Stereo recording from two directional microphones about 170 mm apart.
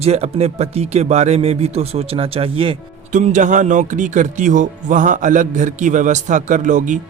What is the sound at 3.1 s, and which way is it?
Speech, 45° right (ahead or behind).